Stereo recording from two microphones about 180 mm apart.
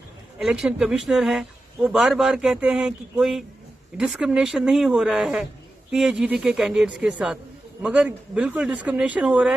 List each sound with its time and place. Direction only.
0.4 s speech: 5° right (ahead or behind)